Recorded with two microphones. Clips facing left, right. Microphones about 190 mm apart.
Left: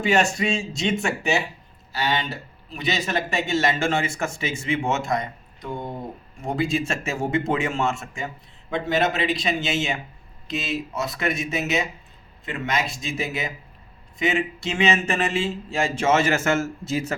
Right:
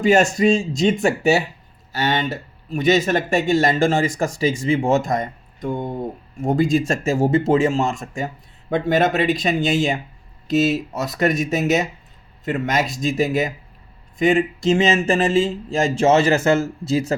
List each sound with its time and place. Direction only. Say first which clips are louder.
0.0 s speech: right 6 dB; 40° right (ahead or behind)